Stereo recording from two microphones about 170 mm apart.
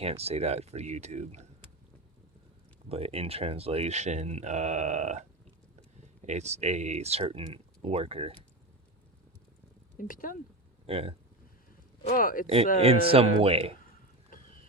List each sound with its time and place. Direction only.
0.0 s speech: 35° right (ahead or behind)
2.9 s speech: 35° right (ahead or behind)
6.2 s speech: 40° right (ahead or behind)
10.0 s speech: 55° left (ahead or behind)
10.8 s speech: 35° right (ahead or behind)
12.0 s speech: 55° left (ahead or behind)
12.8 s speech: 35° right (ahead or behind)